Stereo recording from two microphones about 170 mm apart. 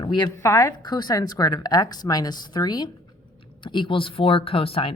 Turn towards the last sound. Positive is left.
turn(degrees=35)  # may be behind; listen again after turning